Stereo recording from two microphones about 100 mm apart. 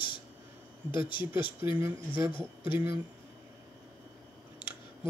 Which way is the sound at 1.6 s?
25° right (ahead or behind).